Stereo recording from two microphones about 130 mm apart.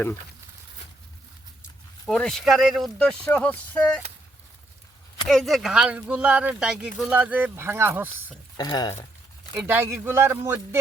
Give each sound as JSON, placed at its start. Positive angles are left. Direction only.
{"t": 2.0, "sound": "speech", "side_deg": 5}
{"t": 5.3, "sound": "speech", "side_deg": 0}
{"t": 8.5, "sound": "speech", "side_deg": 30}
{"t": 9.6, "sound": "speech", "side_deg": -15}